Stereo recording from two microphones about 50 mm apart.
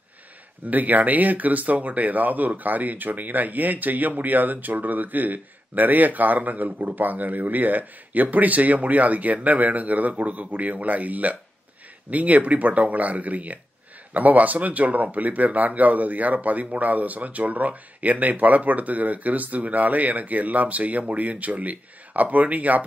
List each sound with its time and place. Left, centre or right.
0.7 s speech: right